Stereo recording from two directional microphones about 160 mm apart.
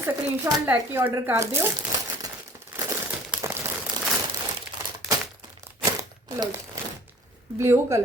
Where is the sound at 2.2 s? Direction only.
20° right (ahead or behind).